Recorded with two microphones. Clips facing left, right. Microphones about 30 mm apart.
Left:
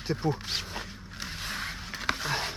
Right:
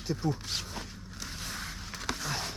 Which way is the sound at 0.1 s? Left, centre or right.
Left.